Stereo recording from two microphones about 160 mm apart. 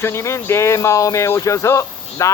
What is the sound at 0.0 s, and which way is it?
Speech, 15° left (ahead or behind).